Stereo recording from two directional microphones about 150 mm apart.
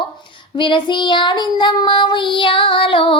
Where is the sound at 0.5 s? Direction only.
30° left (ahead or behind).